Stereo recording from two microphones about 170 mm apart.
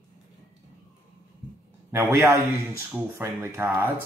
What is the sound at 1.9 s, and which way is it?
Speech, 15° right (ahead or behind).